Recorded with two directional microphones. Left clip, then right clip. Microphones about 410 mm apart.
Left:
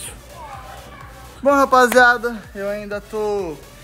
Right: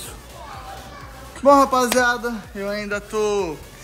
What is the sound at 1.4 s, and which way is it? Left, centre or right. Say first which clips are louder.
Speech: left 1 dB; centre.